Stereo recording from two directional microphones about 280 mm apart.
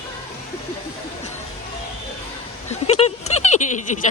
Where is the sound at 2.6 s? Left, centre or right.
Left.